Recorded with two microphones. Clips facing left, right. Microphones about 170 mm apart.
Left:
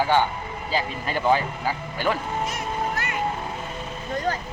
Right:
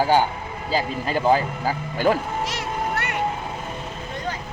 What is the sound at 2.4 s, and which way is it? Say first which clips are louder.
Music: right 1 dB; 90° right.